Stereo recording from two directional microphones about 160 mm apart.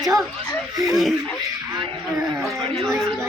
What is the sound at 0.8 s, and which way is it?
Speech, centre (ahead or behind).